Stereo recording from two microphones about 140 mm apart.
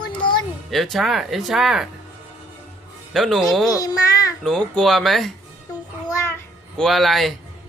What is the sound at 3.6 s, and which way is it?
Speech, 25° left (ahead or behind).